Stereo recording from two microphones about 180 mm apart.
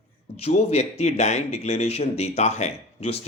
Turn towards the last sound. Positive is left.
turn(degrees=35)  # may be behind; listen again after turning